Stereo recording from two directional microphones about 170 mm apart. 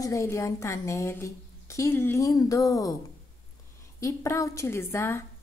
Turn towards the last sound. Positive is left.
turn(degrees=15)  # may be behind; listen again after turning